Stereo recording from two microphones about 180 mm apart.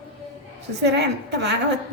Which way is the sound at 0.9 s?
70° right (ahead or behind).